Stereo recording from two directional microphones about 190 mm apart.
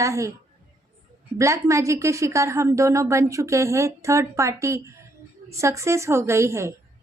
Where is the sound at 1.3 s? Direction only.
15° right (ahead or behind).